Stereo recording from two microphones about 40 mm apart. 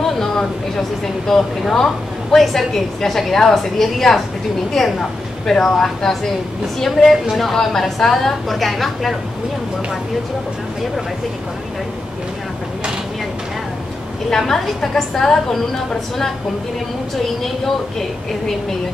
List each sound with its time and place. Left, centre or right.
0.0 s a woman's voice: centre
7.0 s a woman's voice: centre
14.3 s a woman's voice: centre
17.4 s a woman's voice: centre